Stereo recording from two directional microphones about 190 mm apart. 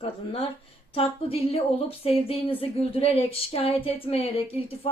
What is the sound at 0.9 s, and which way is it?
Speech, 30° left (ahead or behind).